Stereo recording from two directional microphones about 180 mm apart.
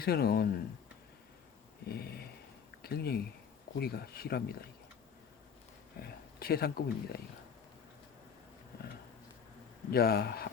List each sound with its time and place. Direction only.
0.0 s speech: 60° left (ahead or behind)
1.9 s speech: 60° left (ahead or behind)
6.0 s speech: 60° left (ahead or behind)
9.9 s speech: 60° left (ahead or behind)